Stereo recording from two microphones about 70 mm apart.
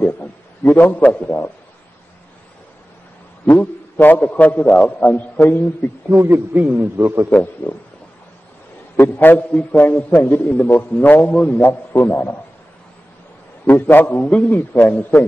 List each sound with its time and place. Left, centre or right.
0.0 s a man's voice: left
3.5 s a man's voice: left
6.2 s a man's voice: right
7.2 s a man's voice: left
8.9 s a man's voice: left
9.5 s a man's voice: centre
13.7 s a man's voice: left